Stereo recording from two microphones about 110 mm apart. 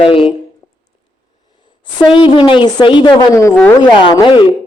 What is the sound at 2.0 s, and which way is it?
A woman's voice, 50° left (ahead or behind).